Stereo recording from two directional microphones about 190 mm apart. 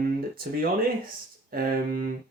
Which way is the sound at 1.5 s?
50° right (ahead or behind).